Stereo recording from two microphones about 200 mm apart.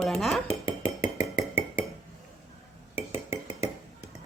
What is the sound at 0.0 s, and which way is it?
Dishes, centre (ahead or behind).